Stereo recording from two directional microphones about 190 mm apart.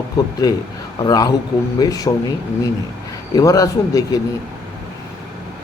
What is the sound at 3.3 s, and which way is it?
Speech, 20° left (ahead or behind).